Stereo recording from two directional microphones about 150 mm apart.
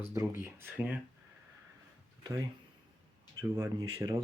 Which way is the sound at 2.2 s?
25° right (ahead or behind).